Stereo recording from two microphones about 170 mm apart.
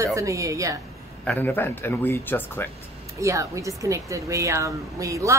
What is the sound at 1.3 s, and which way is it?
Speech, 10° left (ahead or behind).